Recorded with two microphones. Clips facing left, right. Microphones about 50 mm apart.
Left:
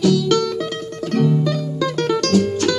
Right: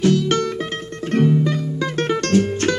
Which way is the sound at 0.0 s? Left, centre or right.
Right.